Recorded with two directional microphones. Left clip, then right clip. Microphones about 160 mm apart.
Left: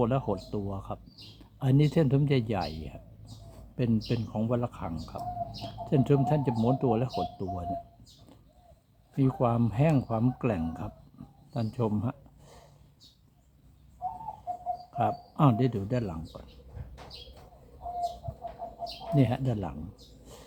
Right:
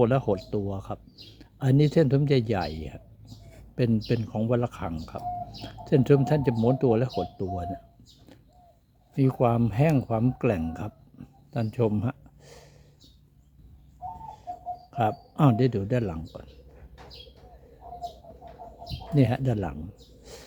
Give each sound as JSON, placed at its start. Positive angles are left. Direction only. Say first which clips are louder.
{"t": 0.0, "sound": "speech", "louder": "right 5 dB", "side_deg": -35}
{"t": 9.1, "sound": "speech", "louder": "right 4 dB", "side_deg": -35}
{"t": 11.5, "sound": "a sound", "louder": "right 5 dB", "side_deg": -35}
{"t": 14.9, "sound": "speech", "louder": "right 3 dB", "side_deg": -30}
{"t": 19.1, "sound": "speech", "louder": "right 3 dB", "side_deg": -30}